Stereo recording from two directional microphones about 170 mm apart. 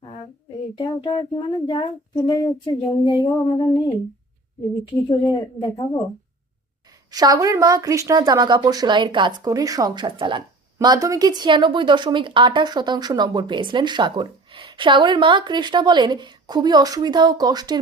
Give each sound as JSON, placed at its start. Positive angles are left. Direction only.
{"t": 0.8, "sound": "speech", "side_deg": 30}
{"t": 4.9, "sound": "speech", "side_deg": 20}
{"t": 7.1, "sound": "speech", "side_deg": -20}